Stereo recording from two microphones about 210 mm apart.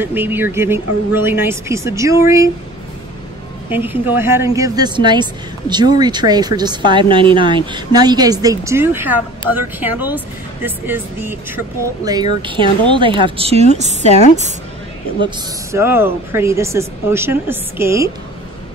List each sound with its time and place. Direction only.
0.0 s a woman's voice: 10° right (ahead or behind)
3.7 s a woman's voice: 10° right (ahead or behind); by 13.8 s 30° right (ahead or behind)
15.2 s a woman's voice: 10° right (ahead or behind)